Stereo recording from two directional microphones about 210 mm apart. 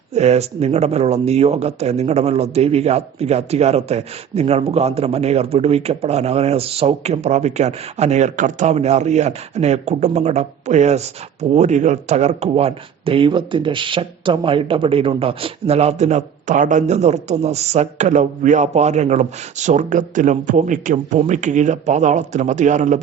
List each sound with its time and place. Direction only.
0.1 s speech: 30° right (ahead or behind)